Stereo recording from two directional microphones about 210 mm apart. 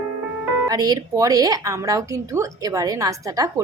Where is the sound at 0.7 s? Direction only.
20° right (ahead or behind).